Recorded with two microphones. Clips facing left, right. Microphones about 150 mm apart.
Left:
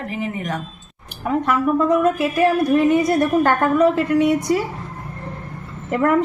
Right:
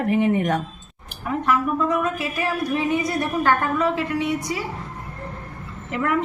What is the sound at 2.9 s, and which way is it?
A woman's voice, 50° left (ahead or behind).